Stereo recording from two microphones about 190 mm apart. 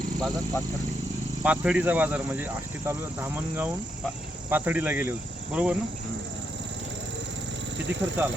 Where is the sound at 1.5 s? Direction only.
5° right (ahead or behind).